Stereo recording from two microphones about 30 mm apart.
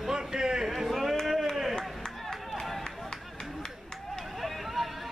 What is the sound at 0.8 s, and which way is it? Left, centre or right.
Speech, centre.